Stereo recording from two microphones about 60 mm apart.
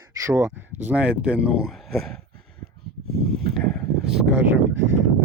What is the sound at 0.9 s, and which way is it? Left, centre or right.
Speech, right.